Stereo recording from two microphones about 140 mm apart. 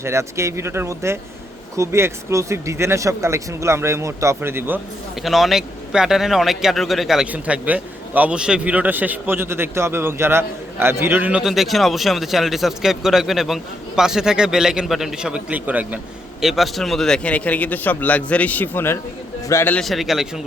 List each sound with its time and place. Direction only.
0.0 s speech: 20° right (ahead or behind)
5.2 s a man's voice: centre (ahead or behind); by 19.8 s 15° left (ahead or behind)
19.8 s a man's voice: centre (ahead or behind)